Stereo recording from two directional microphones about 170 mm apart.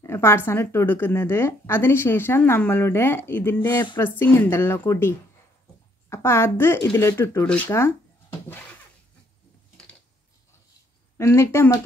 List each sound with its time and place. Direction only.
0.0 s a woman's voice: 15° left (ahead or behind)
7.4 s a sound: 10° left (ahead or behind)
11.1 s a woman's voice: 15° left (ahead or behind)